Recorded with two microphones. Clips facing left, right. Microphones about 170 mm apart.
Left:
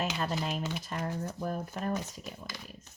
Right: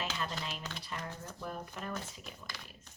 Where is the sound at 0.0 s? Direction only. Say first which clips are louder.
Left 6 dB; 45° left (ahead or behind).